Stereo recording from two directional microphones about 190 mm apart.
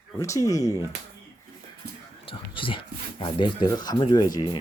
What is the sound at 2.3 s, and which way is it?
Speech, 25° left (ahead or behind).